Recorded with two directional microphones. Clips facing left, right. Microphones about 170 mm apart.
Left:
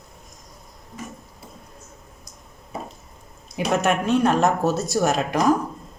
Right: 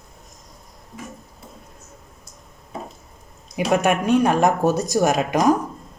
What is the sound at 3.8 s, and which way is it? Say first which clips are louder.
Speech: right 1 dB; 15° right (ahead or behind).